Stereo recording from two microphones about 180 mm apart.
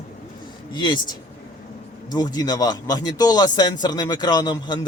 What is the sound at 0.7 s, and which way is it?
A man's voice, 25° left (ahead or behind).